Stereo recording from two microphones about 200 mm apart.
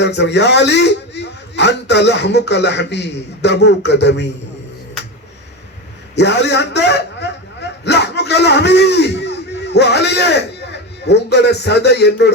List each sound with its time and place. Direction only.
0.0 s a man's voice: 60° left (ahead or behind)
6.1 s a man's voice: 60° left (ahead or behind)